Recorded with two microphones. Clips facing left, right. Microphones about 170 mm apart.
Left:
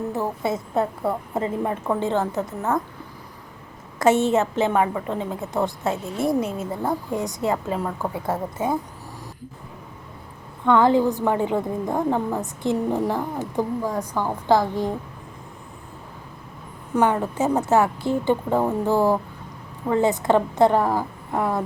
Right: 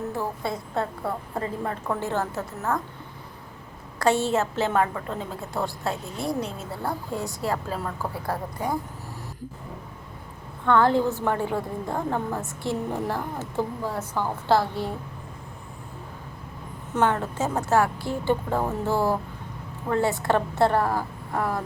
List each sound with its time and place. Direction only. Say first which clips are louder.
0.1 s a woman's voice: left 4 dB; 20° left (ahead or behind)
3.9 s a woman's voice: left 4 dB; 20° left (ahead or behind)
10.7 s a woman's voice: left 3 dB; 15° left (ahead or behind)
16.9 s a woman's voice: left 3 dB; 10° left (ahead or behind)